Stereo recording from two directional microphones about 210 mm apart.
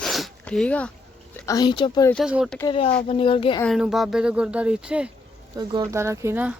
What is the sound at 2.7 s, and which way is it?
Speech, 30° left (ahead or behind).